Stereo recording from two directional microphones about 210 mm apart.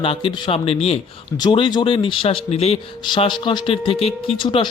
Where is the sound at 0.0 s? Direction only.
25° left (ahead or behind).